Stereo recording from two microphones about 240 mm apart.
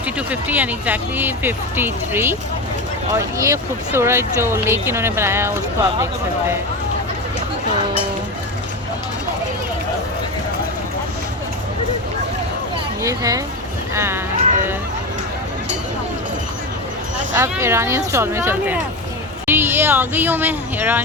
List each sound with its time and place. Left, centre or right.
0.3 s speech: centre
13.0 s speech: centre
14.3 s a sound: right
17.3 s speech: centre